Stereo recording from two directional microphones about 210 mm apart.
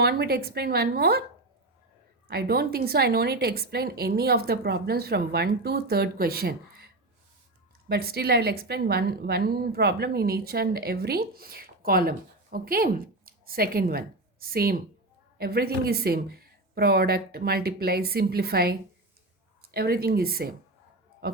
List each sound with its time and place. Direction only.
0.0 s a woman's voice: 50° right (ahead or behind)
2.2 s a woman's voice: 50° right (ahead or behind)